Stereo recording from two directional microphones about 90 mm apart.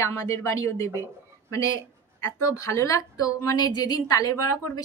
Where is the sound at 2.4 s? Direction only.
35° left (ahead or behind).